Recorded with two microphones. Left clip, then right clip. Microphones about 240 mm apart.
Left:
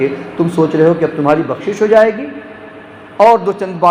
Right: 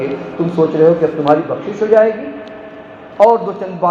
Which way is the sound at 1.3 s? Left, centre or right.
Left.